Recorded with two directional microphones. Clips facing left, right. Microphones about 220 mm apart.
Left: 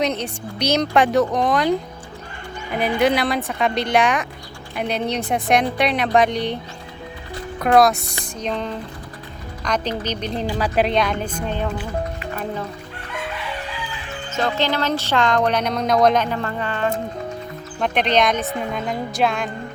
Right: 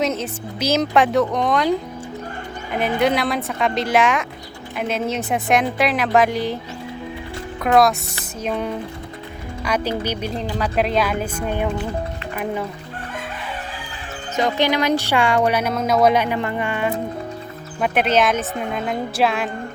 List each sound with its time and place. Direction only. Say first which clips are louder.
0.0 s speech: even; centre (ahead or behind)
2.7 s speech: even; centre (ahead or behind)
7.6 s speech: left 1 dB; centre (ahead or behind)
13.3 s crowing: left 1 dB; 50° right (ahead or behind)
14.3 s speech: right 2 dB; 15° right (ahead or behind)